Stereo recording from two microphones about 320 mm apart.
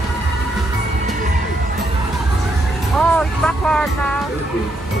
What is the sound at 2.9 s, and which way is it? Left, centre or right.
Speech, centre.